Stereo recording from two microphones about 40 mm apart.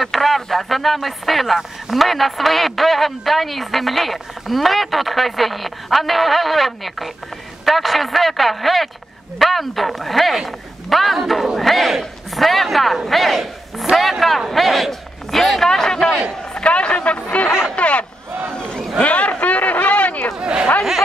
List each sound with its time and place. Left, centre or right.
0.0 s a man's voice: centre
16.5 s speech: left
17.5 s speech: centre
17.7 s speech: left
18.6 s a sound: left
18.9 s a sound: left
20.3 s chatter: right